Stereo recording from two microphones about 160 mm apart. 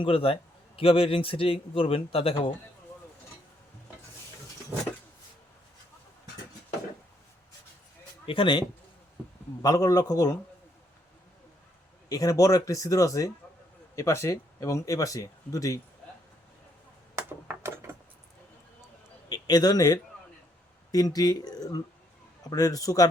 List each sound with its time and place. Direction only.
0.0 s speech: 35° left (ahead or behind)
8.3 s speech: 30° left (ahead or behind)
12.0 s speech: 20° left (ahead or behind)
17.2 s a sound: 15° right (ahead or behind)
19.3 s a man's voice: 25° left (ahead or behind)